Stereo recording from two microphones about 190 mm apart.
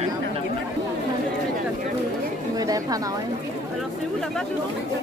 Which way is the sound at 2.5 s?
20° right (ahead or behind).